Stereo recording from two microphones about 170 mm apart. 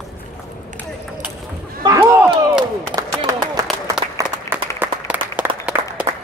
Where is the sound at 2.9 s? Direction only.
25° right (ahead or behind).